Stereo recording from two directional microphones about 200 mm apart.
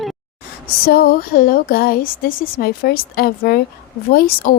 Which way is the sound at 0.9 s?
50° left (ahead or behind).